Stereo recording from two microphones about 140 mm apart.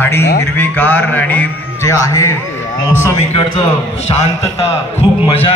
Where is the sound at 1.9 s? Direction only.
20° left (ahead or behind).